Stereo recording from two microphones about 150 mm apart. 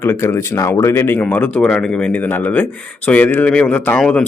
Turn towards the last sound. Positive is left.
turn(degrees=5)  # may be behind; listen again after turning